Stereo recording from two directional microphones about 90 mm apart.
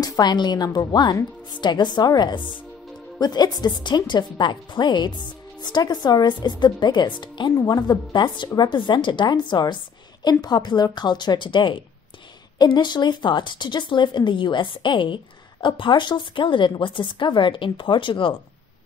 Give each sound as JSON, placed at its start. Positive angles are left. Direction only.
{"t": 0.0, "sound": "a woman's voice", "side_deg": 50}